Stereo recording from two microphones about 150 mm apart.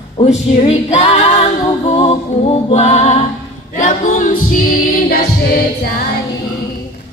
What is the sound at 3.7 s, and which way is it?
A capella, 60° left (ahead or behind).